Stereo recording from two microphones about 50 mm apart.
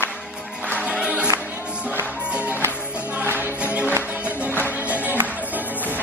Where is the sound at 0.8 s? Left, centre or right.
Centre.